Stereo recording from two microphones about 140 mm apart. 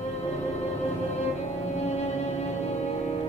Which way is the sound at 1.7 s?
50° left (ahead or behind).